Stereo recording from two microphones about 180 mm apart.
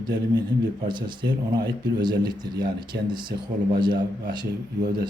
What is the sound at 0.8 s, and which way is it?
Speech, 25° right (ahead or behind).